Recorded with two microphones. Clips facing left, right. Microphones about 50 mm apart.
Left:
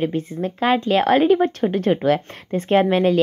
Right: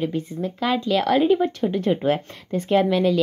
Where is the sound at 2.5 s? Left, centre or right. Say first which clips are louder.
Left 2 dB; left.